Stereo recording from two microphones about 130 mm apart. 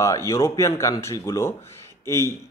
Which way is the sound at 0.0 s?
25° left (ahead or behind).